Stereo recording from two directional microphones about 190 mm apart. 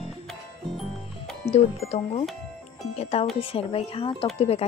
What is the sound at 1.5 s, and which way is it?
A woman's voice, 35° left (ahead or behind).